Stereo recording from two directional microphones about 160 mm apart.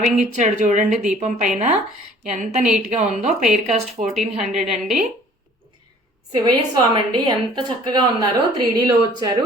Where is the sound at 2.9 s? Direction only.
45° right (ahead or behind).